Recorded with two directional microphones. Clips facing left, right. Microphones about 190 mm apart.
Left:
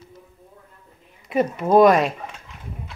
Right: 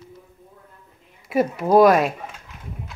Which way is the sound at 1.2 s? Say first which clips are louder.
Right 1 dB; 5° right (ahead or behind).